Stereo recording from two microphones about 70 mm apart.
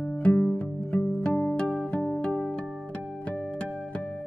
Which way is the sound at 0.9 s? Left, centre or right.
Left.